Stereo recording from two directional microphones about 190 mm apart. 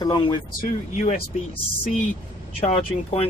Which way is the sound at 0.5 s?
45° left (ahead or behind).